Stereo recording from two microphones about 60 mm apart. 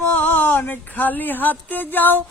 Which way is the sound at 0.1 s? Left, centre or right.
Left.